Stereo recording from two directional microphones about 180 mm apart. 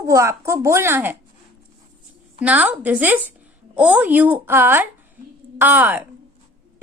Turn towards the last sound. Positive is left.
turn(degrees=-10)  # may be behind; listen again after turning